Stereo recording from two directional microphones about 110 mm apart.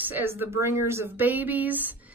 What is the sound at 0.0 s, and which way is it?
Speech, 15° right (ahead or behind).